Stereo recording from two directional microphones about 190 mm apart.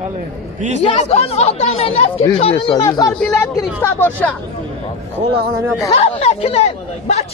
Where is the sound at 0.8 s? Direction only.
30° left (ahead or behind); by 4.3 s 10° left (ahead or behind).